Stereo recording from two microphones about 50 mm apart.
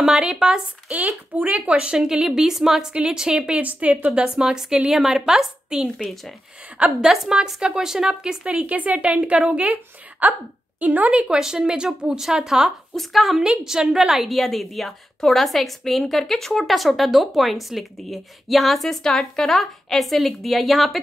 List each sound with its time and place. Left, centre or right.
0.0 s a woman's voice: centre
0.9 s a woman's voice: right
4.2 s a woman's voice: centre
7.1 s a woman's voice: centre; by 11.3 s right
11.3 s a woman's voice: centre
13.4 s a woman's voice: centre